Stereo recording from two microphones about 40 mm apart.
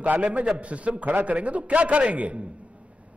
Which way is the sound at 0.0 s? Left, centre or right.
Right.